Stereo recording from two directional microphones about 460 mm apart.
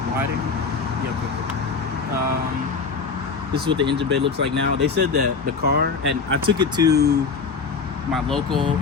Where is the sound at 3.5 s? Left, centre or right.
Right.